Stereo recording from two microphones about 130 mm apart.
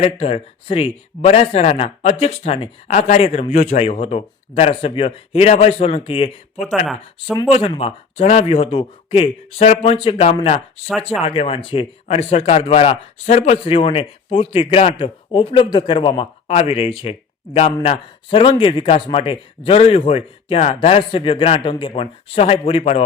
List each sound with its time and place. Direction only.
0.0 s speech: 50° left (ahead or behind)
6.6 s speech: centre (ahead or behind)
7.4 s speech: 45° left (ahead or behind)